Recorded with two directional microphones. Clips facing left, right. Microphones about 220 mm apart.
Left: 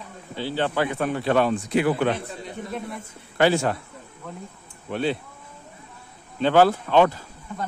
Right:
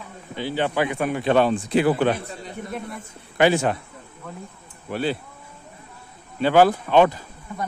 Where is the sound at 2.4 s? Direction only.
Centre (ahead or behind).